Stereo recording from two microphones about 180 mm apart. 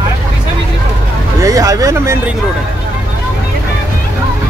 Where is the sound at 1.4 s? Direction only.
20° right (ahead or behind).